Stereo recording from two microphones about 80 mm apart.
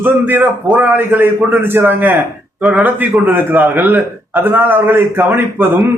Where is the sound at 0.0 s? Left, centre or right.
Right.